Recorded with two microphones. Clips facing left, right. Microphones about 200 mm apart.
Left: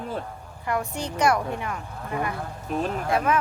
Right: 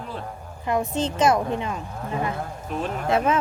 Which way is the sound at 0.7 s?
20° right (ahead or behind).